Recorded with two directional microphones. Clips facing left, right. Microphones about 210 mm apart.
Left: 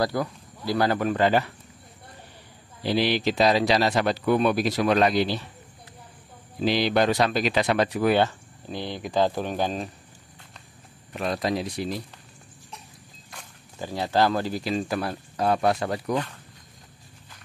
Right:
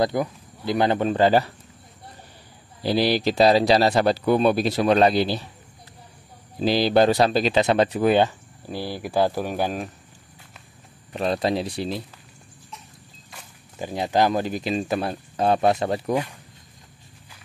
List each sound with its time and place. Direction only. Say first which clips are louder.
0.0 s speech: right 3 dB; 20° right (ahead or behind)
2.8 s speech: right 3 dB; 35° right (ahead or behind)
6.6 s speech: right 4 dB; 35° right (ahead or behind); by 9.8 s 10° right (ahead or behind)
11.1 s speech: right 3 dB; 30° right (ahead or behind)
13.7 s speech: right 2 dB; 15° right (ahead or behind)